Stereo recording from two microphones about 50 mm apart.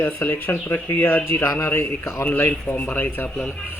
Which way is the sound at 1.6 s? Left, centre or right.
Left.